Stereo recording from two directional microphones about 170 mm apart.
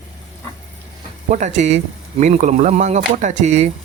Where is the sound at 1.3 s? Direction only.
45° right (ahead or behind).